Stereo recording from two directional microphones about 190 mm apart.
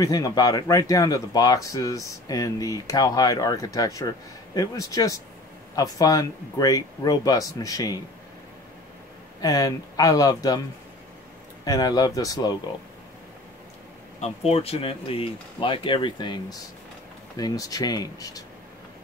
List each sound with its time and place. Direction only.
0.0 s speech: 20° left (ahead or behind)
9.4 s speech: 20° left (ahead or behind)
11.6 s speech: 20° left (ahead or behind)
14.2 s speech: 35° left (ahead or behind)